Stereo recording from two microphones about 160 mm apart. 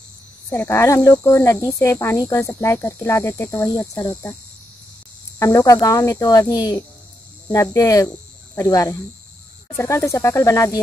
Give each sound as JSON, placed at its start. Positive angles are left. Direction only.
{"t": 0.5, "sound": "speech", "side_deg": 15}
{"t": 5.4, "sound": "speech", "side_deg": 20}